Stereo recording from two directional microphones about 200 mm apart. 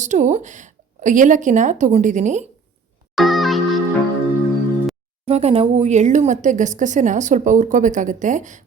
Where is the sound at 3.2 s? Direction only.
Centre (ahead or behind).